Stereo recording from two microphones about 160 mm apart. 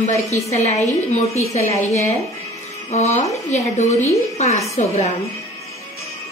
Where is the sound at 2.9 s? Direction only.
45° left (ahead or behind).